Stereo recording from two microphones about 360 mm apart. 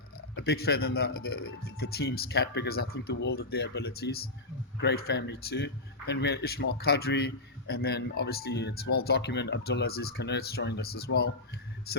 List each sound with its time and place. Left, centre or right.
0.2 s speech: left